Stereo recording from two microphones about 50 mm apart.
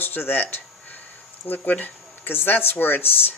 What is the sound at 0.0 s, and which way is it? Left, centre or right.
Speech, left.